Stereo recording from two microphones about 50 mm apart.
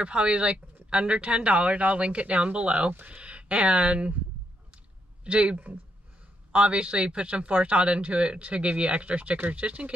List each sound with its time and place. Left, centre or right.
0.0 s a man's voice: right
5.2 s a man's voice: right